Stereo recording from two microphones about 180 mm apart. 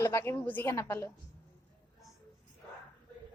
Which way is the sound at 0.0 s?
15° left (ahead or behind).